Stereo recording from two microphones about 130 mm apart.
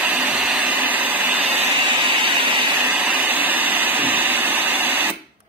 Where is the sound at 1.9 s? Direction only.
35° right (ahead or behind).